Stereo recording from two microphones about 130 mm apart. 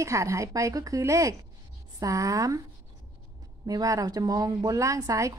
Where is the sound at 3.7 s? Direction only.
25° right (ahead or behind).